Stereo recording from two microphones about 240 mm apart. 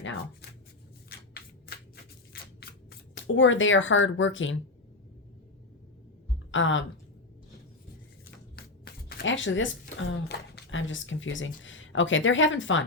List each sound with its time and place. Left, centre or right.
3.2 s speech: left
6.5 s speech: left
8.5 s music: left
9.3 s a woman's voice: left